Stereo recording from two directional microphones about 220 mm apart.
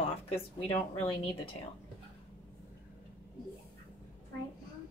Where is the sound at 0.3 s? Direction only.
25° left (ahead or behind).